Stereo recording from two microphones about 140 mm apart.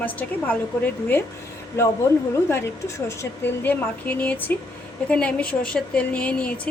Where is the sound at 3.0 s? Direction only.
15° left (ahead or behind).